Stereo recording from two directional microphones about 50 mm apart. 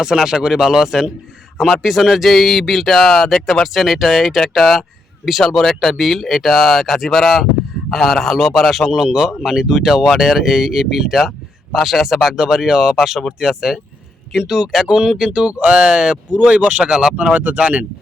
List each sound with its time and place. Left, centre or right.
0.0 s speech: centre
8.9 s speech: centre
15.8 s speech: centre
16.3 s speech: right
16.8 s speech: centre
17.3 s speech: right